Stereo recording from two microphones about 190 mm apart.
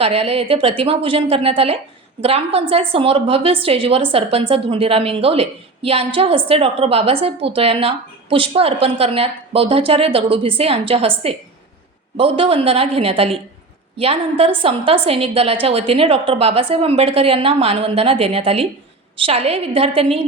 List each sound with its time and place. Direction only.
0.0 s a woman's voice: 30° right (ahead or behind)